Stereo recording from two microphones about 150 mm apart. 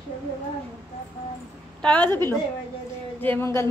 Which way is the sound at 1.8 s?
10° left (ahead or behind).